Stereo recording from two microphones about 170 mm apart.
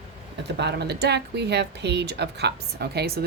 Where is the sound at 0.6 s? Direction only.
75° right (ahead or behind).